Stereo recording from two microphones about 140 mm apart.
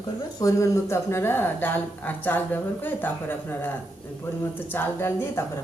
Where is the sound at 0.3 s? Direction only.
25° left (ahead or behind).